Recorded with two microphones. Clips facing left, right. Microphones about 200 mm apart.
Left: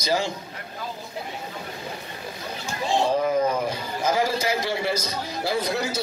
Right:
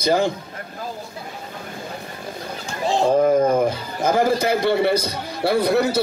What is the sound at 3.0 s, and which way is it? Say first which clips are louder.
A man's voice: right 7 dB; 50° right (ahead or behind).